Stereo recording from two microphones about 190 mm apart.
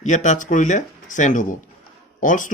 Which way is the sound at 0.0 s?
40° left (ahead or behind).